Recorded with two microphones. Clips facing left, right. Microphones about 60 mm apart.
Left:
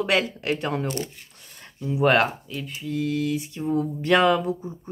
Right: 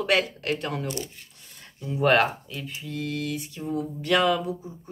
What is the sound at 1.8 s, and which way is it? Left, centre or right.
Speech, centre.